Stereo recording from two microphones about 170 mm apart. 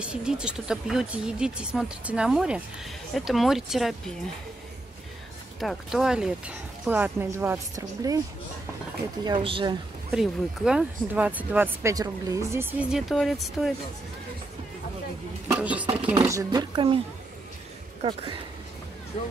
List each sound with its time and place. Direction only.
0.0 s speech: 5° right (ahead or behind)
5.6 s speech: centre (ahead or behind); by 8.2 s 20° right (ahead or behind)
9.2 s speech: 30° right (ahead or behind)
10.1 s speech: 5° right (ahead or behind)
15.5 s speech: 10° right (ahead or behind)
15.9 s speech: 30° right (ahead or behind)
18.0 s speech: 30° right (ahead or behind)
19.1 s speech: 40° left (ahead or behind)